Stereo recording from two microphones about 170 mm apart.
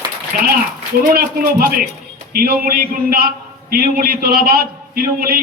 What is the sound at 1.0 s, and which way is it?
A man's voice, 60° right (ahead or behind).